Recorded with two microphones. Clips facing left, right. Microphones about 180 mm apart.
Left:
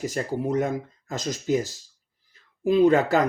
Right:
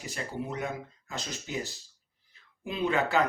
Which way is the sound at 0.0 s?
40° left (ahead or behind).